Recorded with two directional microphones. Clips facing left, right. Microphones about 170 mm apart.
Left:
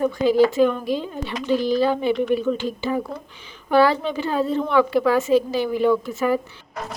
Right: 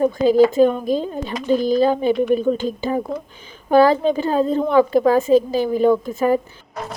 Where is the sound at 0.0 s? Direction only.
40° right (ahead or behind).